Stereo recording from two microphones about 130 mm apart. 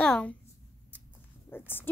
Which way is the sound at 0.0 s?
10° left (ahead or behind).